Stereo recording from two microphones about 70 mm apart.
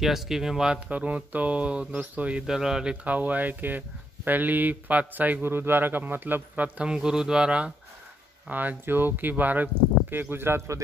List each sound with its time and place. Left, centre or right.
0.0 s speech: centre
0.7 s speech: right
2.4 s speech: centre; by 6.9 s right
6.9 s speech: centre
8.5 s speech: right